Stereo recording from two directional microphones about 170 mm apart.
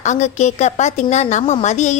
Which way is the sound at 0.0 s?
45° left (ahead or behind).